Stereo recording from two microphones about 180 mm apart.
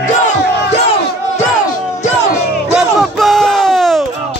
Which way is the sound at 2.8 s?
Centre (ahead or behind).